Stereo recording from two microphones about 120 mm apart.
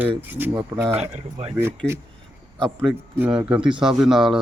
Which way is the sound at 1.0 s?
65° right (ahead or behind).